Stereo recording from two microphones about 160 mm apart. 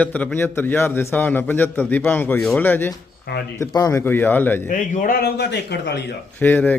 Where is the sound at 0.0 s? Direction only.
10° left (ahead or behind).